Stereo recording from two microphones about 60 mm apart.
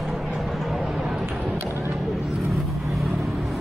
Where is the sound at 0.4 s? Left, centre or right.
Centre.